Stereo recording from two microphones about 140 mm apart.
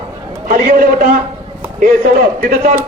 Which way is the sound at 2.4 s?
90° right.